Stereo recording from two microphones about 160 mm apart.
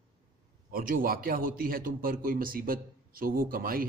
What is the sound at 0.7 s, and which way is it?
A man's voice, 65° right (ahead or behind).